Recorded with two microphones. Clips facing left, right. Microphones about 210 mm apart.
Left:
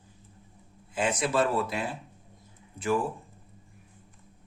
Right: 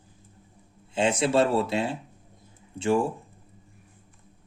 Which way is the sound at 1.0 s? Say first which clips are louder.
Right 4 dB; 25° right (ahead or behind).